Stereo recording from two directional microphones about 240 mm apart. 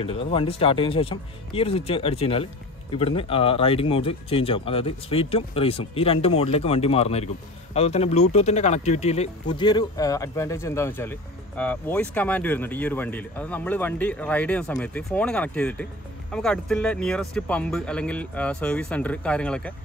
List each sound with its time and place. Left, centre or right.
0.0 s speech: left; by 19.7 s centre